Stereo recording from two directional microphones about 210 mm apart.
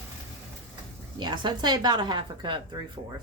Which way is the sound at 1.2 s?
20° right (ahead or behind).